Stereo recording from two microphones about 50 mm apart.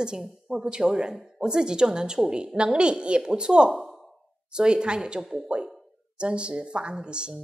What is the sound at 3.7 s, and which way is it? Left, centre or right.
Sigh, centre.